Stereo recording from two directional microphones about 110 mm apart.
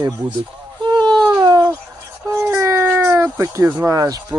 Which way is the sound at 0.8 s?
40° right (ahead or behind).